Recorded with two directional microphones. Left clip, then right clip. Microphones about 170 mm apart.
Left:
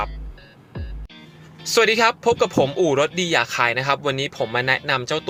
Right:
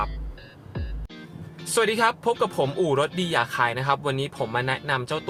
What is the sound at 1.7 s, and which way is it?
Speech, 15° left (ahead or behind).